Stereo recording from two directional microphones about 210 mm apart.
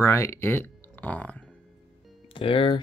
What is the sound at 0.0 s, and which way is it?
Speech, 10° left (ahead or behind).